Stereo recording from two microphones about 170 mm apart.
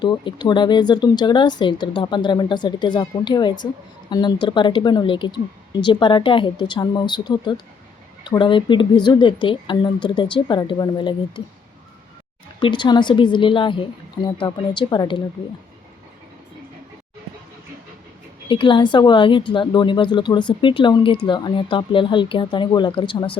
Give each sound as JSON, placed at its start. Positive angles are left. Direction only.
{"t": 0.0, "sound": "speech", "side_deg": 25}
{"t": 12.5, "sound": "speech", "side_deg": 25}
{"t": 18.4, "sound": "speech", "side_deg": 30}